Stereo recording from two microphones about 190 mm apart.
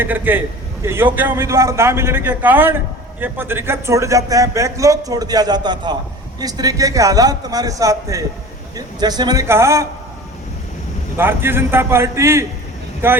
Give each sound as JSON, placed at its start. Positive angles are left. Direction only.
{"t": 0.0, "sound": "a man's voice", "side_deg": -10}
{"t": 11.2, "sound": "a man's voice", "side_deg": -10}